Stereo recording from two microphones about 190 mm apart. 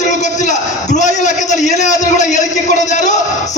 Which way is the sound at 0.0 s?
40° left (ahead or behind).